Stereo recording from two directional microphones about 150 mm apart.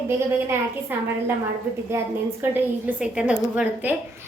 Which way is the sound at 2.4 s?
10° right (ahead or behind).